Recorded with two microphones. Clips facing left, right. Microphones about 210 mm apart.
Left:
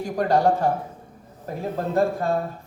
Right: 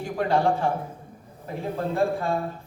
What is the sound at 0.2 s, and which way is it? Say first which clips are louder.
Speech: left 3 dB; 40° left (ahead or behind).